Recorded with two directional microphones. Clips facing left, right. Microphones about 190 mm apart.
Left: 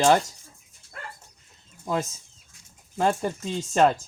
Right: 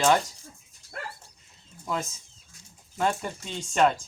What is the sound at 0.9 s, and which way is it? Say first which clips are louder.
Dog: right 3 dB; 45° right (ahead or behind).